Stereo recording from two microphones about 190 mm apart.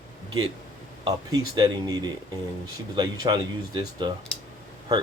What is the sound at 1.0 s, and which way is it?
Speech, 25° right (ahead or behind).